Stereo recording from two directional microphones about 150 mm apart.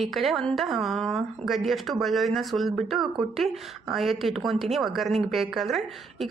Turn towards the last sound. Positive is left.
turn(degrees=0)  # may be behind; listen again after turning